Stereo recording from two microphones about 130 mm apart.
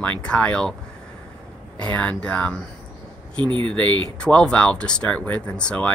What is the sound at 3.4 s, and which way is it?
Speech, 35° right (ahead or behind).